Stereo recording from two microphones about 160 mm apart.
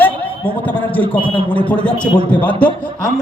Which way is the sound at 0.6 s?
10° left (ahead or behind).